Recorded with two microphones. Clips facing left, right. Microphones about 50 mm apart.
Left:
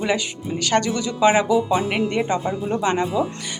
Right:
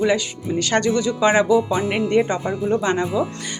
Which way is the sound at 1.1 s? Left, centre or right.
Centre.